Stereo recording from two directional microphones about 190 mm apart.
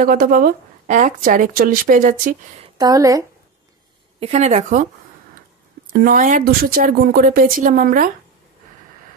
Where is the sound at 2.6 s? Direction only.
20° right (ahead or behind).